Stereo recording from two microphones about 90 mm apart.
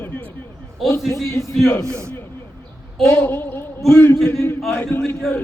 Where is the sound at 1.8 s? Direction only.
35° right (ahead or behind).